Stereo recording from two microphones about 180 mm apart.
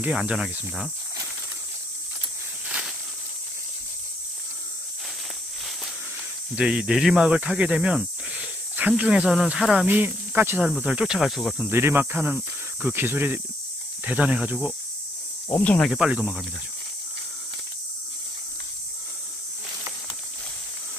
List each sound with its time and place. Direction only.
0.0 s speech: 5° right (ahead or behind)
6.5 s speech: 5° right (ahead or behind)
11.7 s speech: 10° right (ahead or behind)
15.4 s speech: 10° left (ahead or behind)
16.0 s speech: 5° right (ahead or behind)